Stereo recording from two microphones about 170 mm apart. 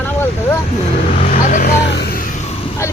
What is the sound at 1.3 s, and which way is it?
Speech, 50° left (ahead or behind).